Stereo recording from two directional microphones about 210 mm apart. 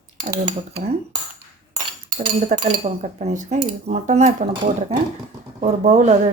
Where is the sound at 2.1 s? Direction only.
35° right (ahead or behind).